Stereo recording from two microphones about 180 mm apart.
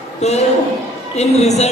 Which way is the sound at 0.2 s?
35° left (ahead or behind).